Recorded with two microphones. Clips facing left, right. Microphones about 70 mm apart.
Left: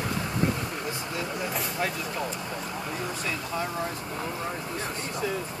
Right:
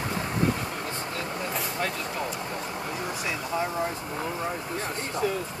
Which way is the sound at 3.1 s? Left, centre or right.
Centre.